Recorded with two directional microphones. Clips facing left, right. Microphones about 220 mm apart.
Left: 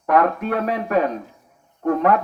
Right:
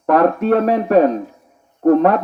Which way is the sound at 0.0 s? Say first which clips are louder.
Right 5 dB; 35° right (ahead or behind).